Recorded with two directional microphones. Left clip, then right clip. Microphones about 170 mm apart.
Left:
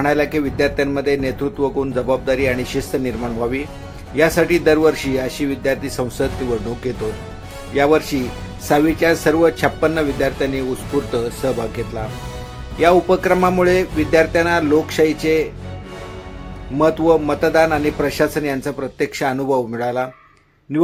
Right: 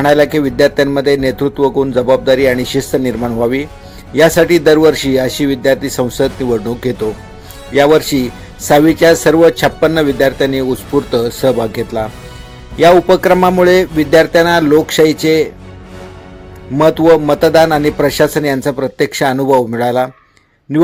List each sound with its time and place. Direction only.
0.0 s speech: 40° right (ahead or behind)
7.7 s a man's voice: 45° right (ahead or behind)
16.7 s a man's voice: 45° right (ahead or behind)